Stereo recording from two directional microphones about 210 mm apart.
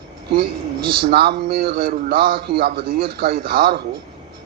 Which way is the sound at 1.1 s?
50° right (ahead or behind).